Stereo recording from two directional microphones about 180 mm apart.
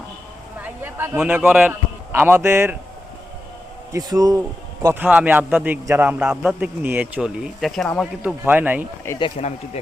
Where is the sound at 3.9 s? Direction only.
20° right (ahead or behind).